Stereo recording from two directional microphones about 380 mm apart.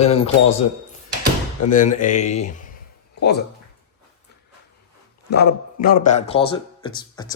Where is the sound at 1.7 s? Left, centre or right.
Centre.